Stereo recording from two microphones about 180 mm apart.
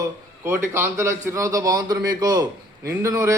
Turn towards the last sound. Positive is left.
turn(degrees=-15)  # may be behind; listen again after turning